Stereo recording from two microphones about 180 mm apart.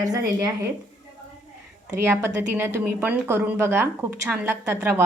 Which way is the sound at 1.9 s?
10° right (ahead or behind).